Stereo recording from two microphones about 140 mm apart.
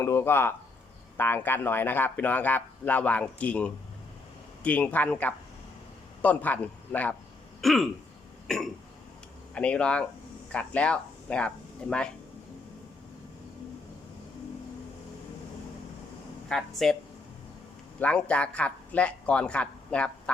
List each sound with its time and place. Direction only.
0.0 s speech: 20° left (ahead or behind)
7.6 s throat clearing: centre (ahead or behind)
8.4 s speech: 5° left (ahead or behind)
16.5 s speech: centre (ahead or behind)
18.0 s speech: 10° left (ahead or behind)